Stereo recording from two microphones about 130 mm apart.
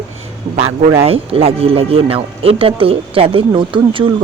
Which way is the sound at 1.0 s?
50° right (ahead or behind).